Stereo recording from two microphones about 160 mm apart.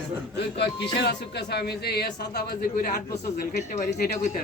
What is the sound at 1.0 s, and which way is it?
Speech, 90° left.